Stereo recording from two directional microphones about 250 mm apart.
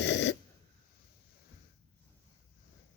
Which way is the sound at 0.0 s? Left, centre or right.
Left.